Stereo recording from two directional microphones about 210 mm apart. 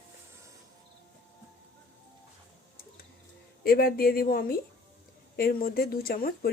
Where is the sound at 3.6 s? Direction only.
45° left (ahead or behind).